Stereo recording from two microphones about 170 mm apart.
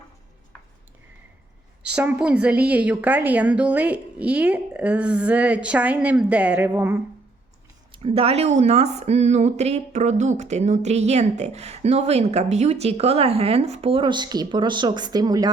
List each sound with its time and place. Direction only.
1.9 s a woman's voice: 5° right (ahead or behind)
7.9 s speech: 35° right (ahead or behind)